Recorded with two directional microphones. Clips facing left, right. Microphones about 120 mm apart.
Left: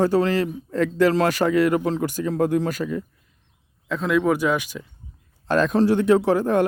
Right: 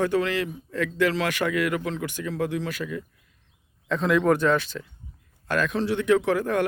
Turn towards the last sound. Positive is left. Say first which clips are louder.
# left 4 dB
turn(degrees=30)  # may be behind; listen again after turning